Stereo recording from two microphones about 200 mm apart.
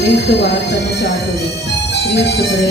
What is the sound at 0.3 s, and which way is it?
Speech, 60° left (ahead or behind).